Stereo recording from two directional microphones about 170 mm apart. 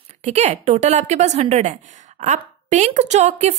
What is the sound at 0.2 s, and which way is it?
A woman's voice, 40° right (ahead or behind).